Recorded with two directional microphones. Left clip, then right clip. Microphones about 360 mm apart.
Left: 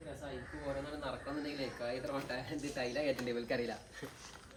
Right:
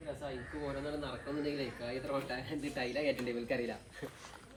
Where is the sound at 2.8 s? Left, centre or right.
Centre.